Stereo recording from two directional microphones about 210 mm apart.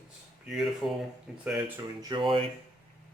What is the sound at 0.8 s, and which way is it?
Speech, centre (ahead or behind).